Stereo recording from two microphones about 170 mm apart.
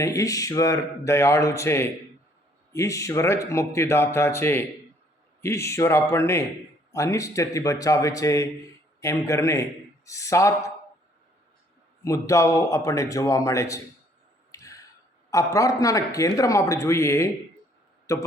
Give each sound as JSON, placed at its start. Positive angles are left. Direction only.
{"t": 0.0, "sound": "a man's voice", "side_deg": 20}
{"t": 12.0, "sound": "a man's voice", "side_deg": 20}
{"t": 14.5, "sound": "a sound", "side_deg": 20}
{"t": 15.3, "sound": "a man's voice", "side_deg": 20}